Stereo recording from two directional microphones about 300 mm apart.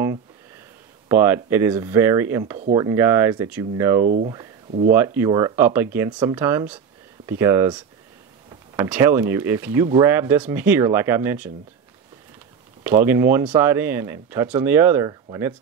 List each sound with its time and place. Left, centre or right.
1.0 s speech: centre
4.0 s speech: right
4.9 s speech: centre
12.8 s speech: centre